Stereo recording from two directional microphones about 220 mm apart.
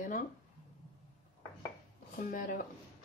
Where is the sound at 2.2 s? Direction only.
35° left (ahead or behind).